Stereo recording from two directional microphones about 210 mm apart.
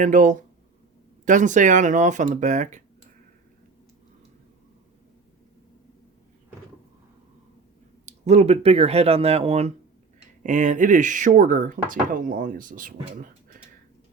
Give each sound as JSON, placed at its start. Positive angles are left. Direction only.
{"t": 0.0, "sound": "speech", "side_deg": -35}
{"t": 8.0, "sound": "speech", "side_deg": -30}